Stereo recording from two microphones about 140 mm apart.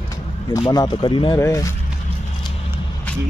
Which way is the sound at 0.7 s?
30° left (ahead or behind).